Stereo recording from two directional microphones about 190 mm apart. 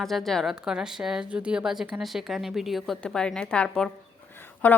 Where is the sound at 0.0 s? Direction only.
Centre (ahead or behind).